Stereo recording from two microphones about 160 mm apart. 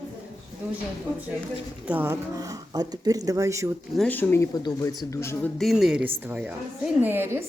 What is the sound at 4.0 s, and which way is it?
Speech, 10° left (ahead or behind).